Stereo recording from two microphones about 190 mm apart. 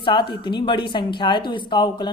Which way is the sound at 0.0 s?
25° left (ahead or behind).